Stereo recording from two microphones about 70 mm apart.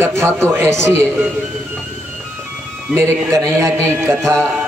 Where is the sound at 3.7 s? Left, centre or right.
Right.